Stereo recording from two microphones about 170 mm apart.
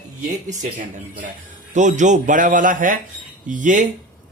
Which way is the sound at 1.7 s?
45° right (ahead or behind).